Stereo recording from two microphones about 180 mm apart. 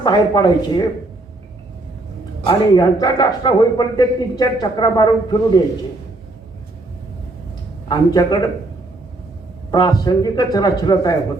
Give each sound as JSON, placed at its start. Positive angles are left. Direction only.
{"t": 0.0, "sound": "speech", "side_deg": 25}
{"t": 2.5, "sound": "speech", "side_deg": 25}
{"t": 7.9, "sound": "speech", "side_deg": 20}
{"t": 9.7, "sound": "speech", "side_deg": 20}